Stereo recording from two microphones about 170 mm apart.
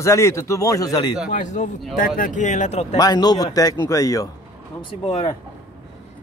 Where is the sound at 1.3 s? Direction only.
45° left (ahead or behind).